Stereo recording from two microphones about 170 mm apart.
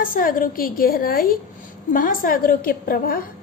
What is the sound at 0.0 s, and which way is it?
A woman's voice, 55° left (ahead or behind).